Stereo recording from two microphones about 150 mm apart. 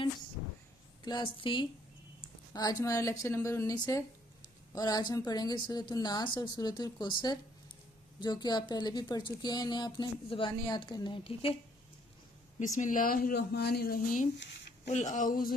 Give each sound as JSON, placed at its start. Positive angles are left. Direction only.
{"t": 1.0, "sound": "a woman's voice", "side_deg": 30}
{"t": 12.5, "sound": "speech", "side_deg": 55}
{"t": 14.9, "sound": "speech", "side_deg": 50}